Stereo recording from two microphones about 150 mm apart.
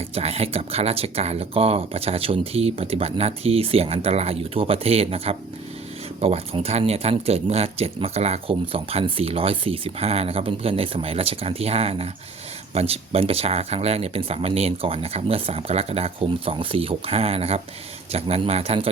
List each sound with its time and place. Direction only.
0.1 s speech: 45° right (ahead or behind)